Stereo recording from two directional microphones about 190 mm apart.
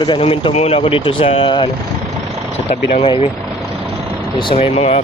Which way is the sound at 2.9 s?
30° left (ahead or behind).